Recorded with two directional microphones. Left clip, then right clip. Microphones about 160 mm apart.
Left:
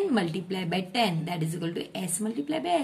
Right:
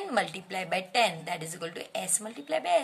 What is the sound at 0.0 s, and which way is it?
A woman's voice, 30° right (ahead or behind).